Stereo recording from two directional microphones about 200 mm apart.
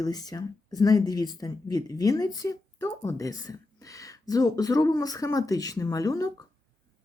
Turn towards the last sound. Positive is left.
turn(degrees=15)  # may be behind; listen again after turning